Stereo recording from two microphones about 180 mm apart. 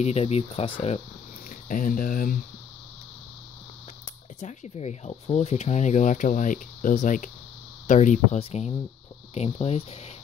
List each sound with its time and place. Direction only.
0.0 s speech: 35° left (ahead or behind)
1.7 s speech: 50° left (ahead or behind)
4.4 s speech: 40° left (ahead or behind)